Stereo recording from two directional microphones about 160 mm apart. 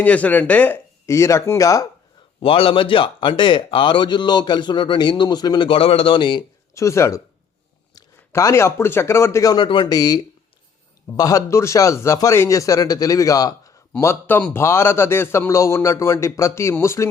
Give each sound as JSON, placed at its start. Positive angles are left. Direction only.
{"t": 0.0, "sound": "a man's voice", "side_deg": 10}
{"t": 2.4, "sound": "a man's voice", "side_deg": 35}
{"t": 6.7, "sound": "a man's voice", "side_deg": 20}
{"t": 11.2, "sound": "a man's voice", "side_deg": 20}